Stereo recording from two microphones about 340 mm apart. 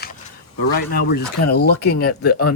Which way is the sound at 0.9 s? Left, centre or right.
Left.